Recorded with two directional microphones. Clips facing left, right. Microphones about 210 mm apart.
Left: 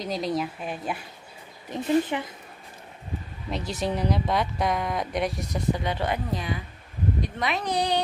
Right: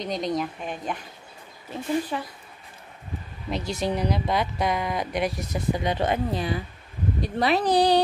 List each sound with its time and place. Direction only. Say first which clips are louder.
0.0 s speech: right 1 dB; centre (ahead or behind)
1.7 s a woman's voice: left 3 dB; 20° left (ahead or behind)
3.4 s speech: right 2 dB; centre (ahead or behind)
5.9 s speech: right 3 dB; 20° right (ahead or behind)
6.3 s a woman's voice: right 3 dB; 35° right (ahead or behind)